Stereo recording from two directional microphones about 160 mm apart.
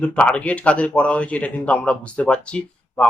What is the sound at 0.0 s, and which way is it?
A man's voice, 5° left (ahead or behind).